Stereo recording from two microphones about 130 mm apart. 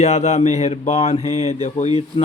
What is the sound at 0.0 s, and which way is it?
Mantra, 55° left (ahead or behind).